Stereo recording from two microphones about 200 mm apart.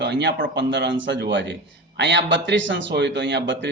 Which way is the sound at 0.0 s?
60° right (ahead or behind).